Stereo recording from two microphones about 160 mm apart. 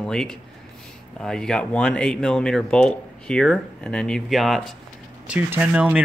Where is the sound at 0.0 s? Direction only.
5° left (ahead or behind).